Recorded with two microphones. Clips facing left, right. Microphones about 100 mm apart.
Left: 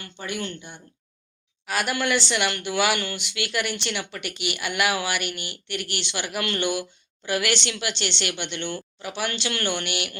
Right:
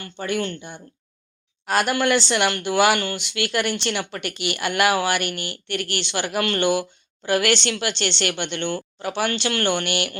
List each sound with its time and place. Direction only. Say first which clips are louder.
0.0 s a woman's voice: right 6 dB; 45° right (ahead or behind)
6.0 s a woman's voice: right 6 dB; 35° right (ahead or behind)